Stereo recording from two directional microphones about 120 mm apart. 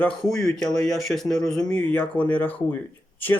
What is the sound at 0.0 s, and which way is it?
Speech, 5° left (ahead or behind).